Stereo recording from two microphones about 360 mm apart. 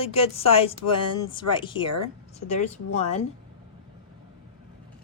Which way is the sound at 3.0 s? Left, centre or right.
Centre.